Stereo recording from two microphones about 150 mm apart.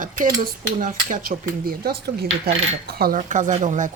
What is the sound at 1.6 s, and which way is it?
Speech, 90° right.